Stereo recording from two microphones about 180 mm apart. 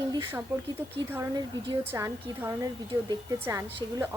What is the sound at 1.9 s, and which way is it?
Speech, 15° right (ahead or behind).